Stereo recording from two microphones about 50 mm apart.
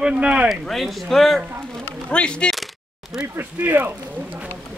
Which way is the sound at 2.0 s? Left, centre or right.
Centre.